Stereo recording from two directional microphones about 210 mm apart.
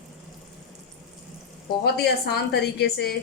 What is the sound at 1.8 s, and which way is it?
Speech, 50° left (ahead or behind).